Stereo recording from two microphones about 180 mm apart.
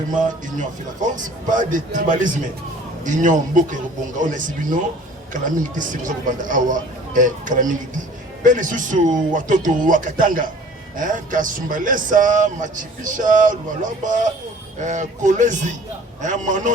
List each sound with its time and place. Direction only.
0.1 s speech: 45° right (ahead or behind)
1.9 s speech: 45° right (ahead or behind)